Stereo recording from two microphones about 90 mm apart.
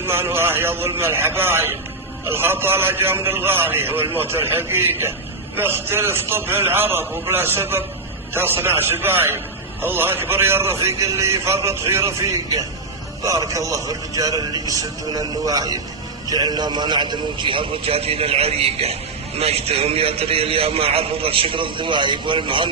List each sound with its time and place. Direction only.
0.0 s a man's voice: 25° right (ahead or behind); by 22.7 s 65° right (ahead or behind)